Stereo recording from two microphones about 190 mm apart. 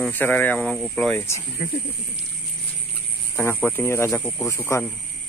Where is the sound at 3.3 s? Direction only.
10° left (ahead or behind).